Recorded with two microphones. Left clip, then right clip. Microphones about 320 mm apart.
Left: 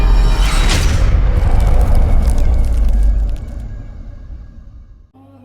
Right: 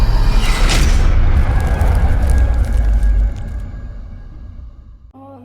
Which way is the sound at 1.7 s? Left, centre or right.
Centre.